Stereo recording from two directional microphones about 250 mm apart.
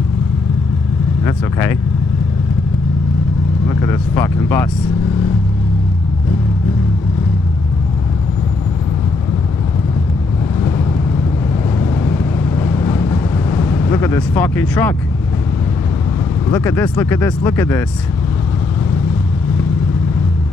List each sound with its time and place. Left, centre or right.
1.2 s speech: centre
3.6 s speech: centre
11.8 s vehicle: centre
16.4 s speech: centre